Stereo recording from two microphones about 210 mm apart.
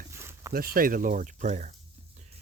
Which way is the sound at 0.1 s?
10° right (ahead or behind).